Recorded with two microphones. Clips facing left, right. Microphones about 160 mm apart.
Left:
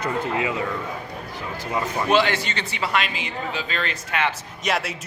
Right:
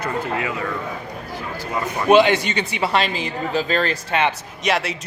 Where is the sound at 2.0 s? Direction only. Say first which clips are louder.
Right 8 dB; 20° right (ahead or behind); by 4.2 s 35° right (ahead or behind).